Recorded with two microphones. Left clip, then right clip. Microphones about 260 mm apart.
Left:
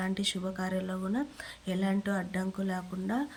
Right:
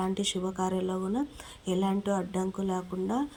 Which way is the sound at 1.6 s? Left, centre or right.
Centre.